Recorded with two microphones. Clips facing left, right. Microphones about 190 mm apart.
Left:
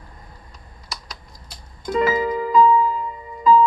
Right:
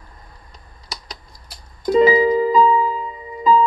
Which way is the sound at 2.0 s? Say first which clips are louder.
Right 7 dB; 30° right (ahead or behind).